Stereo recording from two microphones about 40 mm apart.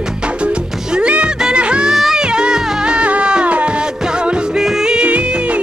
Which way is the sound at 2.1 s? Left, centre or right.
Right.